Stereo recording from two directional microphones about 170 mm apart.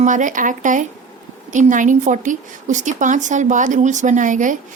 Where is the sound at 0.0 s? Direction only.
50° right (ahead or behind).